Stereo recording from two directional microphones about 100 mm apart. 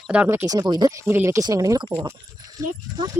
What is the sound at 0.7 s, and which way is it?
Speech, 45° right (ahead or behind).